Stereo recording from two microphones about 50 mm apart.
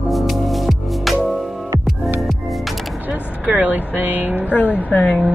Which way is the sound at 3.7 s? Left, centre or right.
Right.